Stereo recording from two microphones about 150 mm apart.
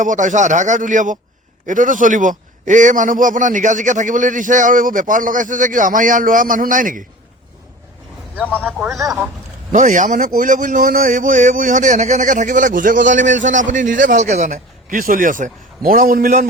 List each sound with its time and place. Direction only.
0.0 s a man's voice: 55° right (ahead or behind)
9.7 s a man's voice: 55° right (ahead or behind)